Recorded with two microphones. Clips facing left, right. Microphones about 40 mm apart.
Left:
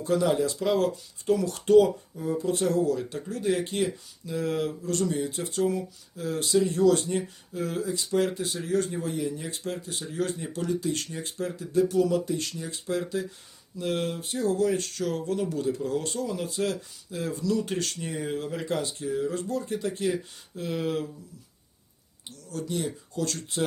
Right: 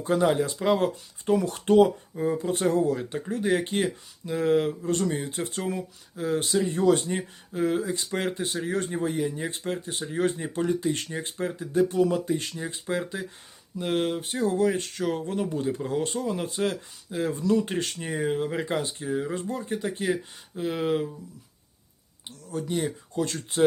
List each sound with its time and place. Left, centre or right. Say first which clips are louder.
0.0 s speech: right 1 dB; right
22.4 s speech: right 2 dB; right